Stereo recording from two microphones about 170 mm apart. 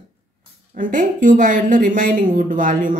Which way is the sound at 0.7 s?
50° right (ahead or behind).